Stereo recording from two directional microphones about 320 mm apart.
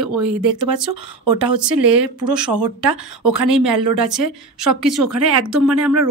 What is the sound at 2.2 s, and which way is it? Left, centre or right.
Speech, right.